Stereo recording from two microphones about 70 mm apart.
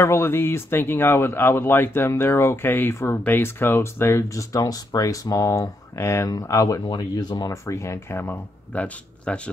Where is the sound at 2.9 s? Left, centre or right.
Left.